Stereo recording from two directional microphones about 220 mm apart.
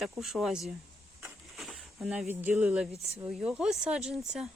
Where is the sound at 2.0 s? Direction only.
5° right (ahead or behind).